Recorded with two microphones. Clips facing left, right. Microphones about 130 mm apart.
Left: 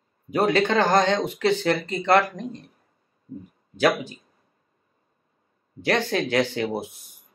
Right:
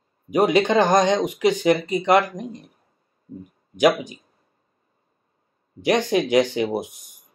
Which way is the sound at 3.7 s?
15° right (ahead or behind).